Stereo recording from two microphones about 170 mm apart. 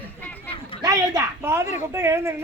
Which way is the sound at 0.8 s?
20° right (ahead or behind).